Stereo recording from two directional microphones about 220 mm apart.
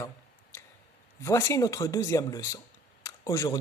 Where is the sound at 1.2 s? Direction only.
10° left (ahead or behind).